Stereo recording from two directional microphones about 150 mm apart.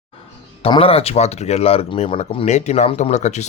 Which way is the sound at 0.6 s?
40° left (ahead or behind).